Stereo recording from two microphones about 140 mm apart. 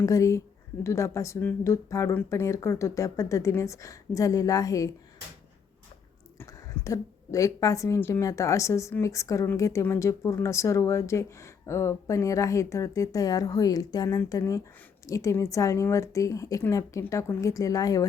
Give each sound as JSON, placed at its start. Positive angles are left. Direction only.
{"t": 0.0, "sound": "a woman's voice", "side_deg": 25}
{"t": 6.4, "sound": "a woman's voice", "side_deg": 20}